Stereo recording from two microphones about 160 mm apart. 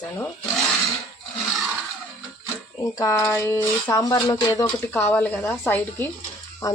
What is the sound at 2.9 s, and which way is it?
Speech, 20° left (ahead or behind).